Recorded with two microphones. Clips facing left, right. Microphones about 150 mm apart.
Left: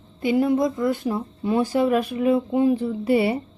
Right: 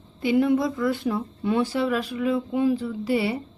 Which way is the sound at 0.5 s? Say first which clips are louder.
Left 2 dB; 20° left (ahead or behind).